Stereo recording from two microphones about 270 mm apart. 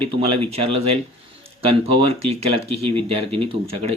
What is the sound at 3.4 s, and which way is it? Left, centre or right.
Speech, right.